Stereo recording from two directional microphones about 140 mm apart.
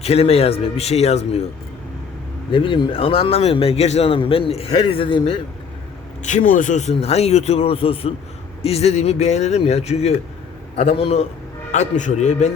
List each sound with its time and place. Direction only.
0.0 s speech: 45° left (ahead or behind)
2.5 s speech: 35° left (ahead or behind)
6.2 s speech: 65° left (ahead or behind); by 11.3 s 45° left (ahead or behind)
11.7 s speech: 60° left (ahead or behind)